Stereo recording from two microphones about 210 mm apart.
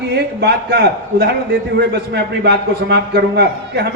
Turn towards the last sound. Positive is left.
turn(degrees=-50)  # may be behind; listen again after turning